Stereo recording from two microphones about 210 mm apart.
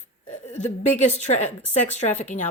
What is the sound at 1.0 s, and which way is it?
Speech, 35° left (ahead or behind).